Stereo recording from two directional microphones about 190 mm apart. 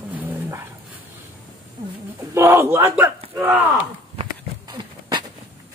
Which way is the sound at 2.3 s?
15° right (ahead or behind).